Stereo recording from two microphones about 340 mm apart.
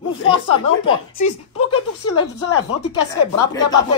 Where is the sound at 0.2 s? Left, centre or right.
Centre.